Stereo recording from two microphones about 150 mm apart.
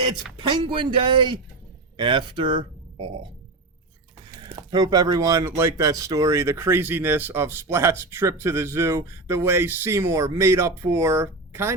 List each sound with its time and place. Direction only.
0.4 s a man's voice: 35° right (ahead or behind)
4.4 s speech: 25° right (ahead or behind)